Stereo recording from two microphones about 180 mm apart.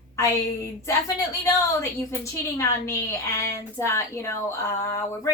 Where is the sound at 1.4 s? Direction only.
15° left (ahead or behind).